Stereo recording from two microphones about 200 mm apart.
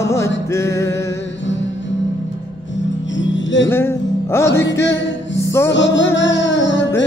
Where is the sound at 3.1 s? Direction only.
65° left (ahead or behind).